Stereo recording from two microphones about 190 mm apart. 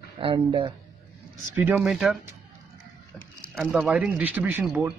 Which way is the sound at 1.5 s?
10° right (ahead or behind).